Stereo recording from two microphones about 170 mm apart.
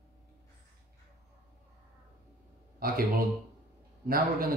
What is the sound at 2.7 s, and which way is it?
Speech, 60° right (ahead or behind).